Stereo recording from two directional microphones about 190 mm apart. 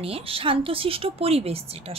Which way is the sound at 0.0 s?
30° right (ahead or behind).